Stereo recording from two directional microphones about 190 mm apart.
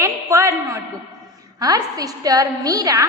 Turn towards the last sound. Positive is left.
turn(degrees=-20)  # may be behind; listen again after turning